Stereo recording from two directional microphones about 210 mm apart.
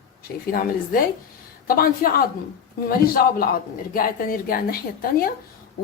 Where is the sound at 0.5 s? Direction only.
45° left (ahead or behind).